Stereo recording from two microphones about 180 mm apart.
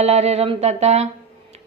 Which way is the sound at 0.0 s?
35° right (ahead or behind).